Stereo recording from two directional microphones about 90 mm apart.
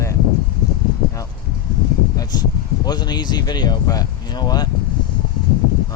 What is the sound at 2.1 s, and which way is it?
Speech, 50° left (ahead or behind).